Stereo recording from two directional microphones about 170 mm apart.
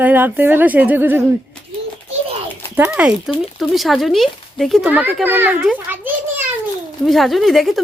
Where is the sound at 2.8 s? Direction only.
10° right (ahead or behind).